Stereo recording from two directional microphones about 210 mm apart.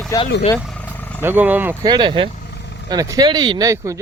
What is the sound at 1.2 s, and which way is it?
Speech, 10° right (ahead or behind).